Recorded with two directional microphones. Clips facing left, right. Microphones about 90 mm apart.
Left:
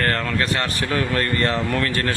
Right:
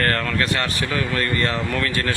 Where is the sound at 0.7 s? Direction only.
35° left (ahead or behind).